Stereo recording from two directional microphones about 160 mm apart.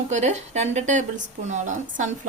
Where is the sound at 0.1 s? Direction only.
45° right (ahead or behind).